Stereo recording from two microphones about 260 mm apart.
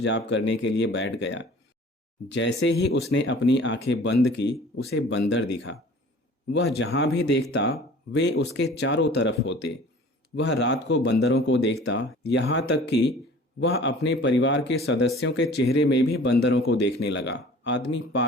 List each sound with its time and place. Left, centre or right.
0.0 s speech: left
6.5 s speech: left